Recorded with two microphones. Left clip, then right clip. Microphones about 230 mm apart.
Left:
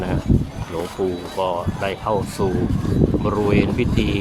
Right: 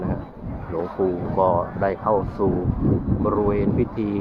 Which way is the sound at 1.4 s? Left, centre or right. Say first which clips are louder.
Right 3 dB; centre.